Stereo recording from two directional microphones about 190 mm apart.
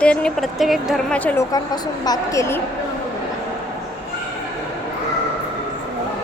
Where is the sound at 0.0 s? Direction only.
5° left (ahead or behind).